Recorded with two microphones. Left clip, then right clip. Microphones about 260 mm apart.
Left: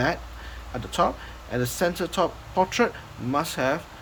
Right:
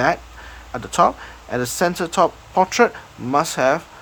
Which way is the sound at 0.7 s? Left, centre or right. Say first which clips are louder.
Right 7 dB; centre.